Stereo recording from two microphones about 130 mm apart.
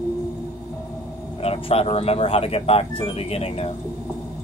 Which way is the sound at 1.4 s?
50° left (ahead or behind).